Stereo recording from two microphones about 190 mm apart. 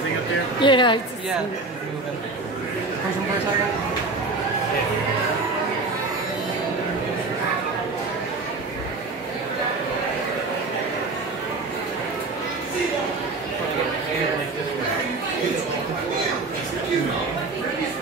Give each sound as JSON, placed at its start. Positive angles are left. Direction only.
{"t": 0.6, "sound": "a woman's voice", "side_deg": 25}